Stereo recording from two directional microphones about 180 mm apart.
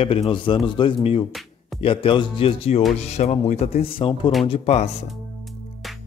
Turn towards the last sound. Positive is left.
turn(degrees=35)  # may be behind; listen again after turning